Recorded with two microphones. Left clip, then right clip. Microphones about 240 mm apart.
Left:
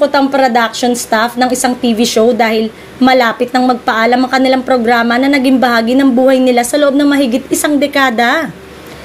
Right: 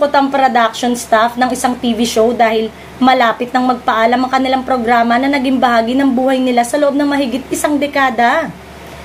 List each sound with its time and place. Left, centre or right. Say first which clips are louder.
0.0 s a woman's voice: left 1 dB; left